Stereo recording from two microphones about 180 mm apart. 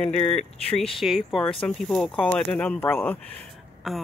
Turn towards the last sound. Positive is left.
turn(degrees=0)  # may be behind; listen again after turning